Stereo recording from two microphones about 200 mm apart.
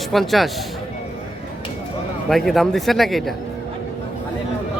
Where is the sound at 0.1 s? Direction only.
Centre (ahead or behind).